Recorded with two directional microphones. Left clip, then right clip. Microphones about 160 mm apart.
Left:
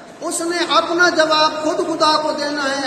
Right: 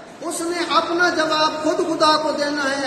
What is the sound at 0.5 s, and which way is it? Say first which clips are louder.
Speech: left 3 dB; 65° left (ahead or behind).